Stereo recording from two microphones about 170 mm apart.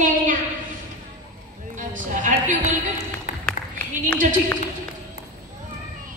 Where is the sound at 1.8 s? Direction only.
50° right (ahead or behind).